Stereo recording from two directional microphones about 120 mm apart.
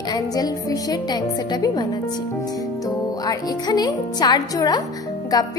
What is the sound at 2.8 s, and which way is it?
Speech, 30° left (ahead or behind).